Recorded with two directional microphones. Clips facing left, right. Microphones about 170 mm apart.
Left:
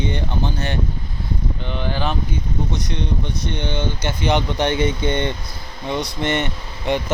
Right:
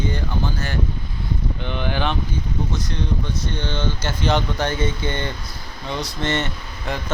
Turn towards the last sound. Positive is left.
turn(degrees=25)  # may be behind; listen again after turning